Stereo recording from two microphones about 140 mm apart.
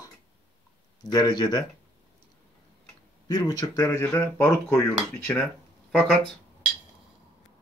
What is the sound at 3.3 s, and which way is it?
Speech, 25° left (ahead or behind).